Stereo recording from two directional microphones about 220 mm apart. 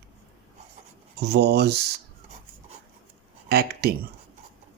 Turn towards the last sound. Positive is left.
turn(degrees=-45)  # may be behind; listen again after turning